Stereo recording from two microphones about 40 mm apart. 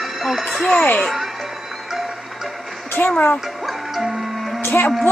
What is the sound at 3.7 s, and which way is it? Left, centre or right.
Music, centre.